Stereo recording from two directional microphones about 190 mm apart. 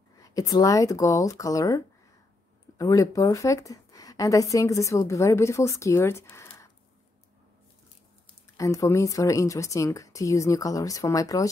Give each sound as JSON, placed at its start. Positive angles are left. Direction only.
{"t": 0.2, "sound": "a woman's voice", "side_deg": 20}
{"t": 2.8, "sound": "a woman's voice", "side_deg": 15}
{"t": 8.5, "sound": "a woman's voice", "side_deg": 15}